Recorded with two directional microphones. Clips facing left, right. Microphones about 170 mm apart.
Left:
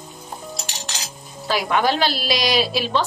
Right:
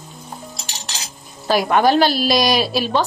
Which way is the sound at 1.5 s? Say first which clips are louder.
Right 5 dB; 45° right (ahead or behind).